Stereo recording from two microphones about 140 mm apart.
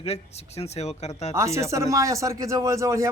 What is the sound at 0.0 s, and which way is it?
Speech, 50° left (ahead or behind).